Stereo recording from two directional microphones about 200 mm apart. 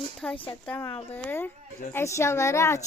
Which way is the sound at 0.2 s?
5° left (ahead or behind).